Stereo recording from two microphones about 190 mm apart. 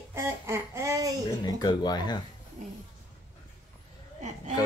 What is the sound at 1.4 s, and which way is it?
Speech, 20° left (ahead or behind).